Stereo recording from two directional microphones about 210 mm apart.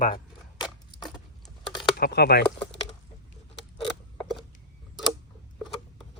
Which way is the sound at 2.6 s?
30° left (ahead or behind).